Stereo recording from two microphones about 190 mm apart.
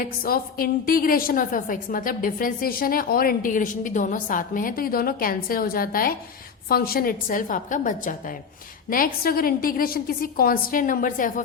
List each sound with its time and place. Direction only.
0.2 s a woman's voice: 50° left (ahead or behind)